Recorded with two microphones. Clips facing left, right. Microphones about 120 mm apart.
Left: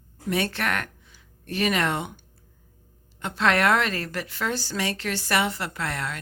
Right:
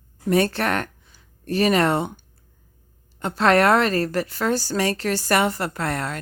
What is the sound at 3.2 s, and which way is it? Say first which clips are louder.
A woman's voice: right 5 dB; 40° right (ahead or behind).